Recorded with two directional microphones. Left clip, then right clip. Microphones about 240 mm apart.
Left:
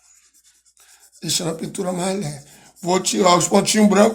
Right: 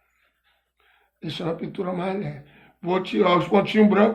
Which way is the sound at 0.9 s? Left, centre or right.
Left.